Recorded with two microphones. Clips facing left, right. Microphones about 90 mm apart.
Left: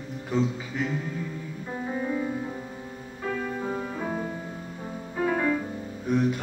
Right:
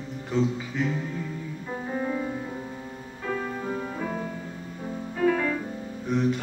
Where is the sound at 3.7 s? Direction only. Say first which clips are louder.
Even; 15° left (ahead or behind).